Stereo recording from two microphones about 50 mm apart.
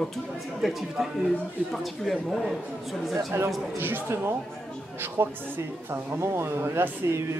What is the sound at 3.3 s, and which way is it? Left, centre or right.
Speech, right.